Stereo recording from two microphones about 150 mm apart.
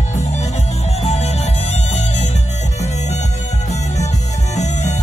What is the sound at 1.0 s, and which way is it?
Music, 45° left (ahead or behind).